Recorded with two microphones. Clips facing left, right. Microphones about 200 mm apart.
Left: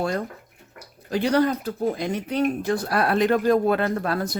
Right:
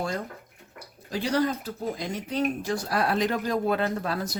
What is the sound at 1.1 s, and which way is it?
Speech, 60° left (ahead or behind).